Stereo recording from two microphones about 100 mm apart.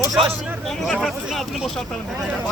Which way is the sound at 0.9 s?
Centre (ahead or behind).